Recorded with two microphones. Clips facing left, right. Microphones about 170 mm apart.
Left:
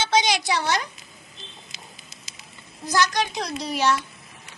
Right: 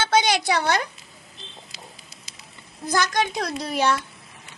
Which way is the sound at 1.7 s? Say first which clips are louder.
Right 2 dB; 20° left (ahead or behind).